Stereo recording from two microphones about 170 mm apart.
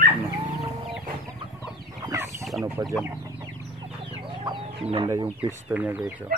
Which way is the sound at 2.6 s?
20° right (ahead or behind).